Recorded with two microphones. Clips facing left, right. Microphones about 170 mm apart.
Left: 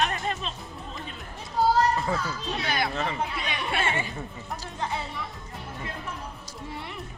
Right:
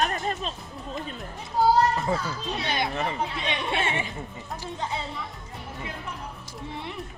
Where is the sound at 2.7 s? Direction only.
20° right (ahead or behind).